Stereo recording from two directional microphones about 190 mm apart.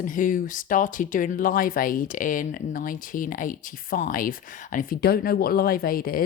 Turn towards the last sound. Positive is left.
turn(degrees=50)  # may be behind; listen again after turning